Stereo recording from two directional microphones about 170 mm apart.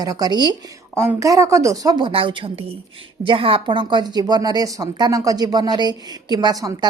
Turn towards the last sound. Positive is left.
turn(degrees=-25)  # may be behind; listen again after turning